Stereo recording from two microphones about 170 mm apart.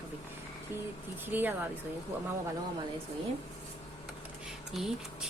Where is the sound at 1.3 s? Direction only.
10° right (ahead or behind).